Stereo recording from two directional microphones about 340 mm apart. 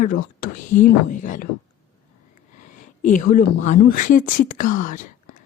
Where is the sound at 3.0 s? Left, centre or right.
Left.